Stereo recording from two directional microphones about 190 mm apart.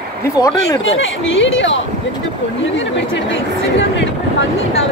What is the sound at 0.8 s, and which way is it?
Speech, 85° left.